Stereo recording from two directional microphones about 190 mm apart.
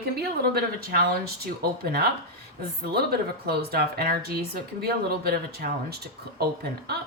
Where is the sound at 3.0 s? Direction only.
55° right (ahead or behind).